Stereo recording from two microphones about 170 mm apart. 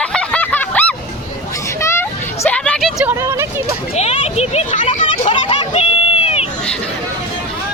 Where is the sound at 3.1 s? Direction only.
15° right (ahead or behind).